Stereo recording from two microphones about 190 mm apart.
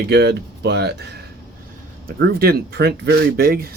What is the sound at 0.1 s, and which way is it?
Speech, 60° right (ahead or behind).